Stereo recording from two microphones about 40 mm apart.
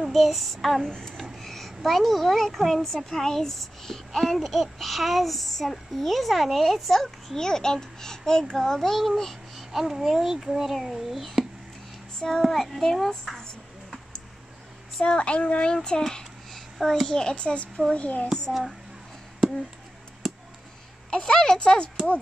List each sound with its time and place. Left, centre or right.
0.1 s a woman's voice: centre
9.6 s a child's voice: centre
15.0 s speech: left
16.5 s a sound: centre
17.1 s a child's voice: centre
17.9 s a child's voice: left
18.5 s a woman's voice: centre
21.2 s a child's voice: centre